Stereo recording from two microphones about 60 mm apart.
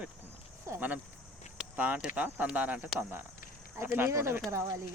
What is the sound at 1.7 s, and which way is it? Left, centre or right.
Speech, right.